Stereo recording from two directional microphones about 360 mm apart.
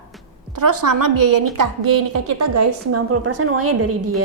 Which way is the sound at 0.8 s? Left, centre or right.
Right.